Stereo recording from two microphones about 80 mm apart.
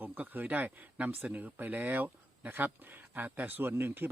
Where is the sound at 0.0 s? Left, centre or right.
Right.